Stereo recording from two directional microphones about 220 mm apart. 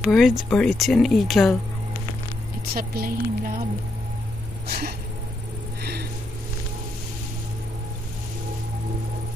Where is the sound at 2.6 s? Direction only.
45° right (ahead or behind).